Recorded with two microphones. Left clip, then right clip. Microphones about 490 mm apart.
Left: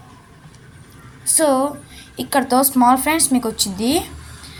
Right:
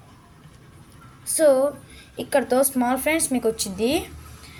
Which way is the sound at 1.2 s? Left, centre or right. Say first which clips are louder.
Left 1 dB; right.